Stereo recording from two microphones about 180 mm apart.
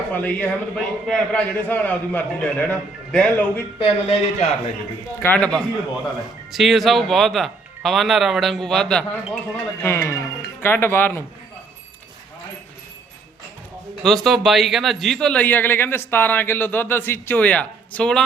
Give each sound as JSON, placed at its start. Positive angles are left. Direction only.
{"t": 0.1, "sound": "speech", "side_deg": 10}
{"t": 3.8, "sound": "speech", "side_deg": 35}
{"t": 5.2, "sound": "speech", "side_deg": 10}
{"t": 9.8, "sound": "speech", "side_deg": 15}
{"t": 14.0, "sound": "speech", "side_deg": 0}